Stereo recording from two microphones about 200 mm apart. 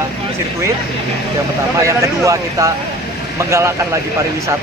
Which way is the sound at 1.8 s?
15° right (ahead or behind).